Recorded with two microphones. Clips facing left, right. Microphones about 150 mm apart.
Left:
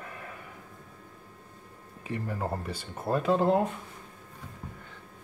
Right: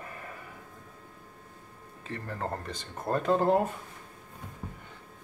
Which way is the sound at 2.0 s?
10° left (ahead or behind).